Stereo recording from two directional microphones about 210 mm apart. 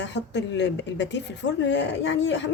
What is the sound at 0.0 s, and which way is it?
A woman's voice, 60° left (ahead or behind).